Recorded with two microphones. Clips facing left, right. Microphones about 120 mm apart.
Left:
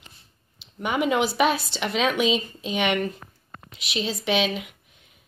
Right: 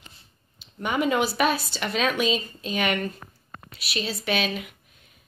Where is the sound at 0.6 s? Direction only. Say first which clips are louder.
Left 1 dB; 15° left (ahead or behind).